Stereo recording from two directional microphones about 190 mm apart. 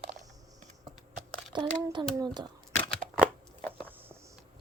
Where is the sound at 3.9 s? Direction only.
10° right (ahead or behind).